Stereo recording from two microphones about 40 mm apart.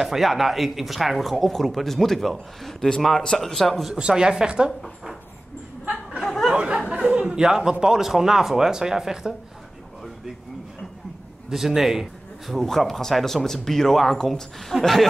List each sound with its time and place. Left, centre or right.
0.0 s speech: centre
3.9 s a woman's voice: centre
6.5 s a woman's voice: right
11.5 s a man's voice: centre
12.6 s speech: centre
14.7 s speech: centre